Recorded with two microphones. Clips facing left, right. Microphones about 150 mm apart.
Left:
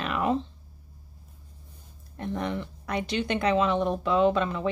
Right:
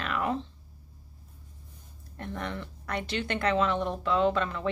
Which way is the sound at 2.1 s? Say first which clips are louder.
Left 5 dB; 15° left (ahead or behind).